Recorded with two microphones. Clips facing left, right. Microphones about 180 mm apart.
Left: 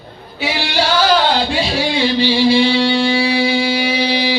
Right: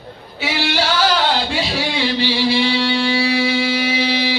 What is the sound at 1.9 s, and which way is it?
Music, 15° left (ahead or behind).